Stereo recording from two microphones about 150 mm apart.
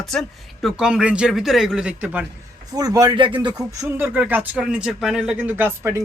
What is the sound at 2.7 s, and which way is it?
A man's voice, 25° right (ahead or behind).